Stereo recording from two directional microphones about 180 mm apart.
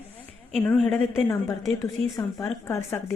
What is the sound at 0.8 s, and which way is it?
A woman's voice, 10° left (ahead or behind).